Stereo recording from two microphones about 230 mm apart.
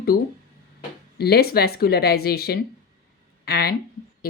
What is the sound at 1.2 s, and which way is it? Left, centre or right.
Speech, left.